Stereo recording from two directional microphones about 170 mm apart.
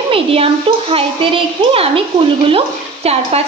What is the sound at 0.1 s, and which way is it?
A child's voice, 35° right (ahead or behind).